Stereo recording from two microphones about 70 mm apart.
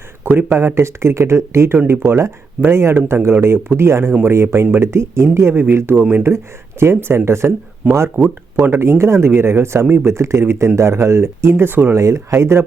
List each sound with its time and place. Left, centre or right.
0.3 s speech: right
7.8 s speech: centre
8.5 s speech: right
11.9 s speech: right